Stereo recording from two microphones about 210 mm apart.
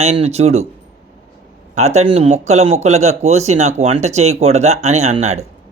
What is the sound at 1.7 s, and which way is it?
A man's voice, 30° right (ahead or behind).